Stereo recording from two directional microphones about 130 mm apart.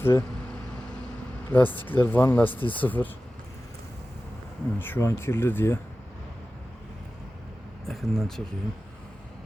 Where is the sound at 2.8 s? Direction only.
15° left (ahead or behind).